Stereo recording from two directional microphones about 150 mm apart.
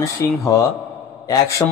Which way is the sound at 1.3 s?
20° left (ahead or behind).